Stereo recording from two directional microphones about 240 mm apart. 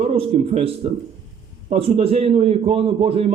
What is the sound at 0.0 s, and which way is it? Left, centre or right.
A man's voice, right.